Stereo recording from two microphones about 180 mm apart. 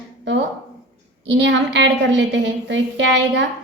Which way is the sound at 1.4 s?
80° right.